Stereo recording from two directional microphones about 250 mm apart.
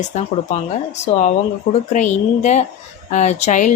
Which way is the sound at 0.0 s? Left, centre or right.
Left.